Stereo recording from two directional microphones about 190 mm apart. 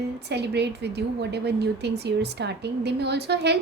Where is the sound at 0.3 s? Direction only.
60° right (ahead or behind).